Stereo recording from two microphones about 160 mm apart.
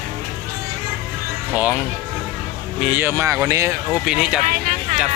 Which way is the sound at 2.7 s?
10° right (ahead or behind).